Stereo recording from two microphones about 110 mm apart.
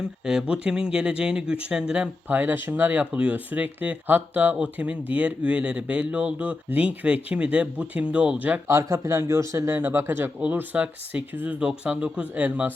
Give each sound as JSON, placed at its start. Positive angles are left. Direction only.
{"t": 0.0, "sound": "speech", "side_deg": -5}
{"t": 8.6, "sound": "speech", "side_deg": -25}